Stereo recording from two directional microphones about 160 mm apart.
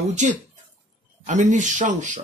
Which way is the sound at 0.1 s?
50° right (ahead or behind).